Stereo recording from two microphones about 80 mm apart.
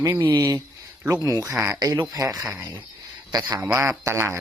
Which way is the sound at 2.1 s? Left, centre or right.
Right.